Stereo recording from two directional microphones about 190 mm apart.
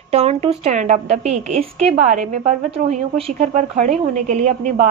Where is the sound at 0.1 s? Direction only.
30° right (ahead or behind).